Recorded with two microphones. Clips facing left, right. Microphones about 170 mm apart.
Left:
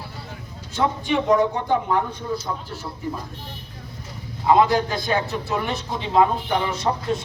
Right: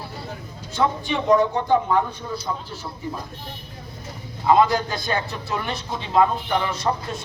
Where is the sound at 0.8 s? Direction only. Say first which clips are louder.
Left 1 dB; 15° left (ahead or behind).